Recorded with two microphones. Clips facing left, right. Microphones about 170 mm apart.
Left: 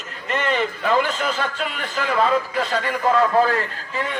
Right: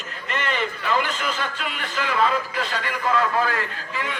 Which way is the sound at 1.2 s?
40° left (ahead or behind).